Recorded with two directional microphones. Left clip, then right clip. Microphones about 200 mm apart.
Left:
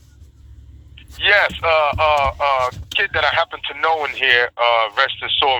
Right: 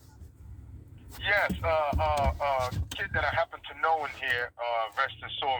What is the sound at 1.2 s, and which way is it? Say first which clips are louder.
Speech: left 12 dB; 35° left (ahead or behind).